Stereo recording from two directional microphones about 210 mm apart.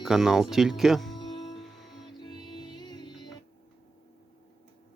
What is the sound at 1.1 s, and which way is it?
Music, 20° left (ahead or behind).